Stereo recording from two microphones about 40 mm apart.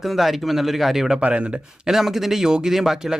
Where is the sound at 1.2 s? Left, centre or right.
Right.